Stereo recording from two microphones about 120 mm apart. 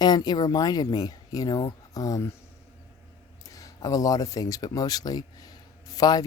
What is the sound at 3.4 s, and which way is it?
Speech, 30° left (ahead or behind).